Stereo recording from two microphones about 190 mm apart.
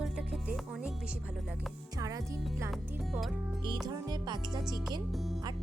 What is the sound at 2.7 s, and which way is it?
Speech, centre (ahead or behind).